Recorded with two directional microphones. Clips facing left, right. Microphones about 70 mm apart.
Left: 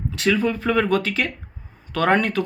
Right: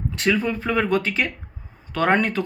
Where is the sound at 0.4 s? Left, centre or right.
Right.